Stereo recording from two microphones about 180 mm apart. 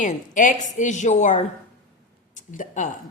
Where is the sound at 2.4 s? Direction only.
45° left (ahead or behind).